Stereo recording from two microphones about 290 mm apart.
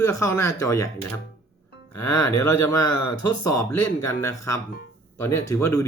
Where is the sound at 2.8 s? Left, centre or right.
Left.